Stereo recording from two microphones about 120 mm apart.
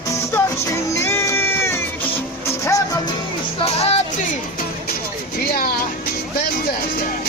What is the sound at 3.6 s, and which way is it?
Music, 55° left (ahead or behind).